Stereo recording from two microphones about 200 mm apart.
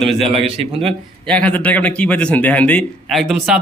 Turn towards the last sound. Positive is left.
turn(degrees=0)  # may be behind; listen again after turning